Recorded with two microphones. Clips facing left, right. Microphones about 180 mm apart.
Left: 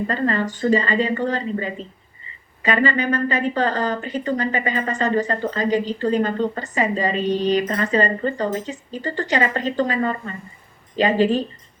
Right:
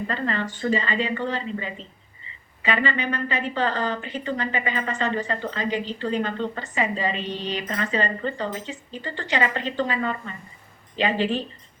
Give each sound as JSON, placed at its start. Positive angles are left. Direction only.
{"t": 0.1, "sound": "a woman's voice", "side_deg": 40}